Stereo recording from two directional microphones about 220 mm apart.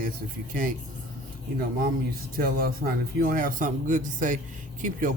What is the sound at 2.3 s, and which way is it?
Speech, 40° right (ahead or behind).